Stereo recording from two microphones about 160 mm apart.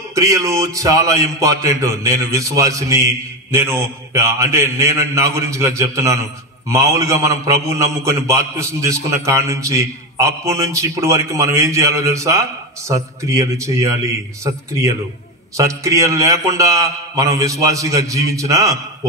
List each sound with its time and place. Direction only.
0.1 s a man's voice: 20° right (ahead or behind)